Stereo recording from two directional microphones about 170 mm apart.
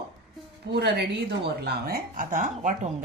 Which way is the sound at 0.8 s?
75° right (ahead or behind).